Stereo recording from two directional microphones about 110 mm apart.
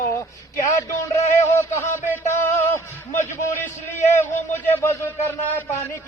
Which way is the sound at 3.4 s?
25° left (ahead or behind).